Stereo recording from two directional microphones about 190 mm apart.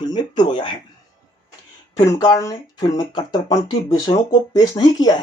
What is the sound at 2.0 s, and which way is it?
Speech, 20° left (ahead or behind).